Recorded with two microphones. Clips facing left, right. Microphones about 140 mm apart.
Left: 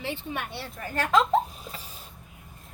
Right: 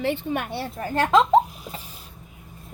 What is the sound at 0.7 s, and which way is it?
Speech, 30° right (ahead or behind).